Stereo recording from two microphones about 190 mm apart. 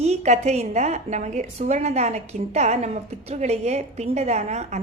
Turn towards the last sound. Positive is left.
turn(degrees=-35)  # may be behind; listen again after turning